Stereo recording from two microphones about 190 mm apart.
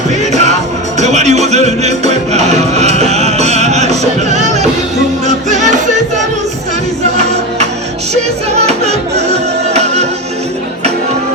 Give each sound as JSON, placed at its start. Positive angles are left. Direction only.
{"t": 0.9, "sound": "music", "side_deg": -35}
{"t": 8.1, "sound": "music", "side_deg": -35}